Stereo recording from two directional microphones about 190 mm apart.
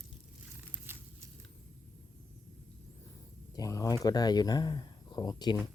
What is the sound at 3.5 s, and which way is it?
Speech, 20° left (ahead or behind).